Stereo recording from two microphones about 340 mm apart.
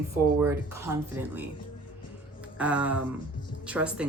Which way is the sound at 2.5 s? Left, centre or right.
Centre.